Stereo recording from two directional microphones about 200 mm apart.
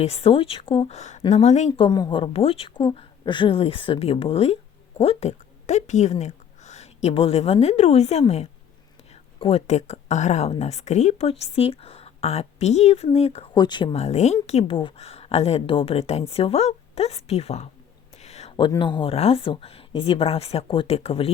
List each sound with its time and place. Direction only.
0.0 s a woman's voice: 30° left (ahead or behind)